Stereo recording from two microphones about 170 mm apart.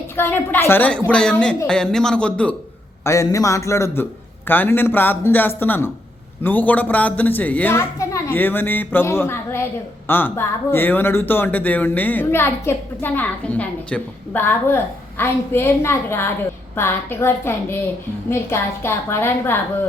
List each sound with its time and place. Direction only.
0.2 s a man's voice: 10° left (ahead or behind)
3.0 s speech: 20° left (ahead or behind)